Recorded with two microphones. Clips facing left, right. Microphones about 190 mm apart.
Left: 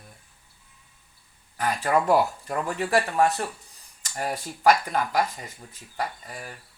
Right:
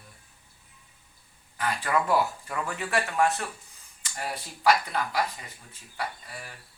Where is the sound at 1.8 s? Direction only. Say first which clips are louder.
Left 4 dB; 45° left (ahead or behind).